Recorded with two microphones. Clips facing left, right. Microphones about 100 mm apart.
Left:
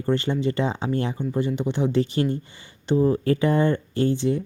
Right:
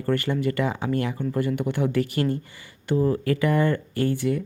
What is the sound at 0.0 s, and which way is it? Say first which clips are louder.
Speech: left 1 dB; 25° left (ahead or behind).